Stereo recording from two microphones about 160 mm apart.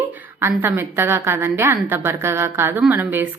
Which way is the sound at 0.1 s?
15° right (ahead or behind).